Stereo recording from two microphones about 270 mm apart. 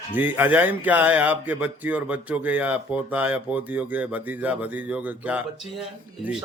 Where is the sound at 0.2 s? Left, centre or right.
Centre.